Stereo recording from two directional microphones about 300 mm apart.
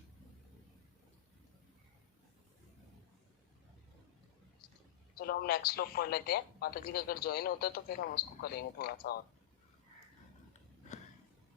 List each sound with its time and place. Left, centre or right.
5.1 s speech: left